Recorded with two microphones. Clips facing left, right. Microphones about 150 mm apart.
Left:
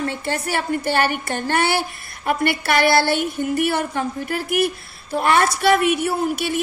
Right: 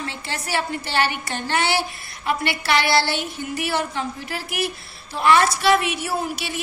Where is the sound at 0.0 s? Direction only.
50° left (ahead or behind).